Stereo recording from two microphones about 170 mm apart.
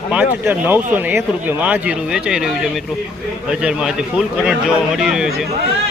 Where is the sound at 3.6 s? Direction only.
5° right (ahead or behind).